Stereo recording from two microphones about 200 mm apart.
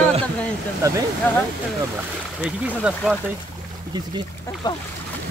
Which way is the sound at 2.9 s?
5° right (ahead or behind).